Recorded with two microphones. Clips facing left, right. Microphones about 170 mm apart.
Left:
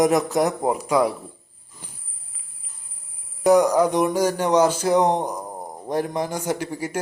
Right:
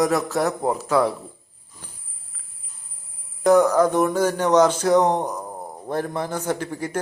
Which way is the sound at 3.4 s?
10° left (ahead or behind).